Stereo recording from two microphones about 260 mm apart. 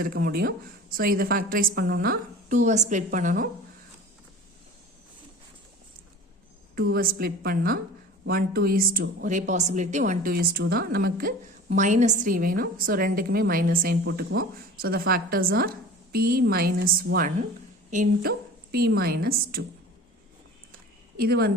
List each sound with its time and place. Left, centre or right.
0.0 s speech: right
6.9 s speech: right
21.2 s speech: right